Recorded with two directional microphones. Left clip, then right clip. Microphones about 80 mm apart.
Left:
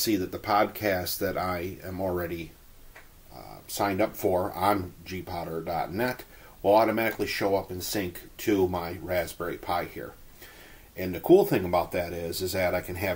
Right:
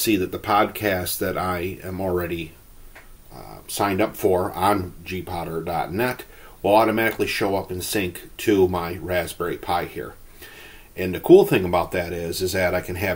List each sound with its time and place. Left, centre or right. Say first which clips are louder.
0.0 s speech: right 6 dB; left
9.8 s speech: right 6 dB; centre
11.0 s speech: right 7 dB; left